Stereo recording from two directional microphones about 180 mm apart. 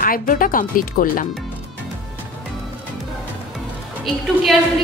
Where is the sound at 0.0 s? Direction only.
50° left (ahead or behind).